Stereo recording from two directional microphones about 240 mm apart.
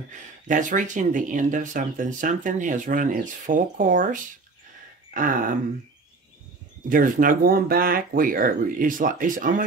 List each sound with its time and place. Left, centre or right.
0.5 s speech: right
6.9 s speech: right